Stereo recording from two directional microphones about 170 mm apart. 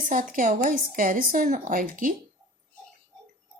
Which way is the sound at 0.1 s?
50° right (ahead or behind).